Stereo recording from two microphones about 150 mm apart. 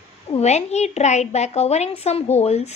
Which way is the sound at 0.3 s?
50° left (ahead or behind).